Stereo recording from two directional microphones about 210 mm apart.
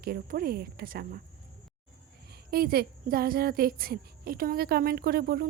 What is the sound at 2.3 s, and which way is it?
A woman's voice, 45° right (ahead or behind).